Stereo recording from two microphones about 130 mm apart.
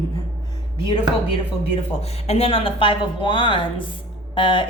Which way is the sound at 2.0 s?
50° left (ahead or behind).